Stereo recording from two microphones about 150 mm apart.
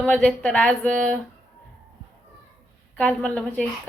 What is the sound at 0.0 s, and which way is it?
Speech, 5° left (ahead or behind).